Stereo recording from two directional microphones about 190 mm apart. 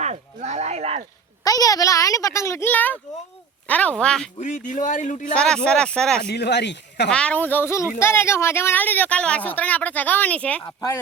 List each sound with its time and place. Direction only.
0.0 s speech: 40° right (ahead or behind)
1.5 s speech: 20° left (ahead or behind)
4.4 s speech: 40° left (ahead or behind)
5.3 s speech: 5° left (ahead or behind)
6.2 s speech: 60° left (ahead or behind)
7.1 s speech: 5° left (ahead or behind)